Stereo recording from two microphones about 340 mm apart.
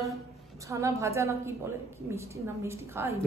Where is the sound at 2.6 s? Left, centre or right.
Centre.